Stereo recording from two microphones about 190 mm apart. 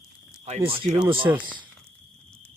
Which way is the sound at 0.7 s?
30° right (ahead or behind).